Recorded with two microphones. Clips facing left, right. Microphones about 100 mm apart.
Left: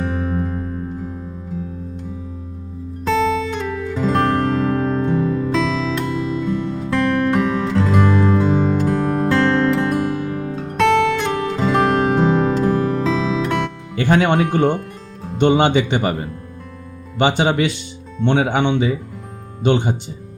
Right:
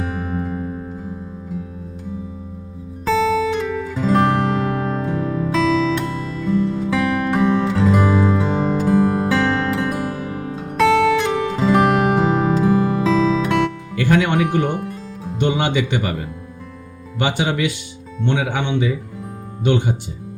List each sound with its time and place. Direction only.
0.0 s music: 5° right (ahead or behind)
3.0 s music: centre (ahead or behind)
13.9 s music: 25° left (ahead or behind)
14.7 s music: 5° right (ahead or behind)
15.4 s speech: 25° left (ahead or behind)
17.2 s speech: 25° left (ahead or behind)
19.6 s speech: 25° left (ahead or behind)